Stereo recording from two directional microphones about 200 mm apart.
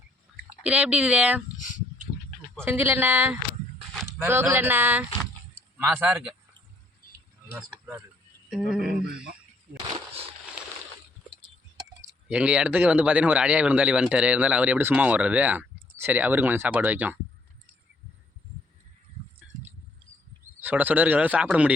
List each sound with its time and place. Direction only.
0.6 s a man's voice: 5° right (ahead or behind)
1.5 s a sound: 40° left (ahead or behind)
2.6 s a man's voice: 10° right (ahead or behind)
7.5 s speech: 10° right (ahead or behind)
12.3 s a man's voice: 5° right (ahead or behind)
20.6 s a man's voice: 10° right (ahead or behind)